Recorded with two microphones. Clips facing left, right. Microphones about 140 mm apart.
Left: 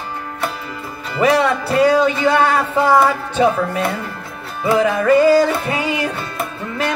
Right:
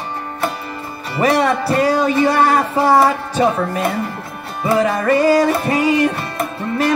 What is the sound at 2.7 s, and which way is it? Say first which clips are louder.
Music: left 1 dB; 30° right (ahead or behind).